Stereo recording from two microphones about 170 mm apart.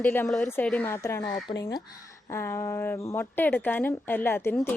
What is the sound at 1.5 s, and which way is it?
Speech, 35° left (ahead or behind).